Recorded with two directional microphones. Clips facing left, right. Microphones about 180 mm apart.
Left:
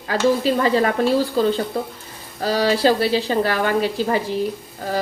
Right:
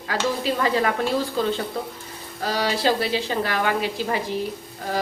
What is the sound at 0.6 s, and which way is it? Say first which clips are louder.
Speech: left 4 dB; 35° left (ahead or behind).